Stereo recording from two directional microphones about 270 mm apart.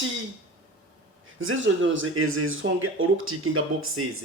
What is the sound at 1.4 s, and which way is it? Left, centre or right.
Speech, right.